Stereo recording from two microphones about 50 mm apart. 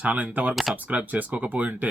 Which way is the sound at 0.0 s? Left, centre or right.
Right.